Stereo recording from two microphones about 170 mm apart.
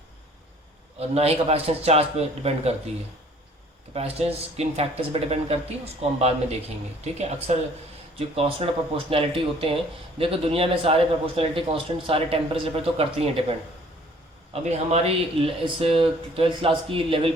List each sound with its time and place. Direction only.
0.9 s a man's voice: 35° right (ahead or behind)
3.9 s a man's voice: 35° right (ahead or behind)
8.4 s a man's voice: 35° right (ahead or behind)
14.5 s a man's voice: 40° right (ahead or behind)